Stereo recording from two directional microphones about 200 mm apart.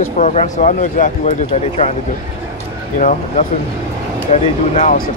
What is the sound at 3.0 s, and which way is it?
Speech, 40° left (ahead or behind).